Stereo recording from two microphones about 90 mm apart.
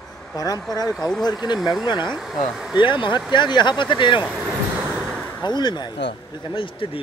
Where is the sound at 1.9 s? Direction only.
60° left (ahead or behind).